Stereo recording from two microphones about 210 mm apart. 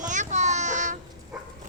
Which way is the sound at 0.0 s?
35° right (ahead or behind).